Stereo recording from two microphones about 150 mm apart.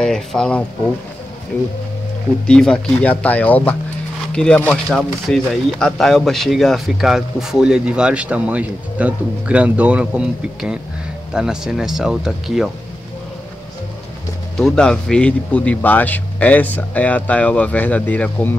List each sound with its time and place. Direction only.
0.0 s speech: 5° left (ahead or behind)
2.4 s speech: 5° left (ahead or behind)
14.6 s speech: 5° left (ahead or behind)